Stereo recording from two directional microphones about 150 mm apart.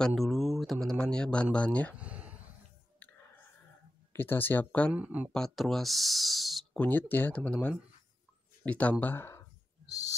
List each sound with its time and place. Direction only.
0.0 s speech: centre (ahead or behind)
2.0 s a sound: 10° right (ahead or behind)
4.1 s speech: 15° left (ahead or behind)
4.9 s speech: 10° right (ahead or behind)
5.3 s speech: 5° left (ahead or behind)
9.8 s owl: 25° left (ahead or behind)